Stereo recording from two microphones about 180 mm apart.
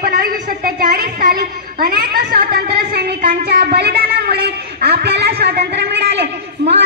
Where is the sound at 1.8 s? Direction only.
55° right (ahead or behind).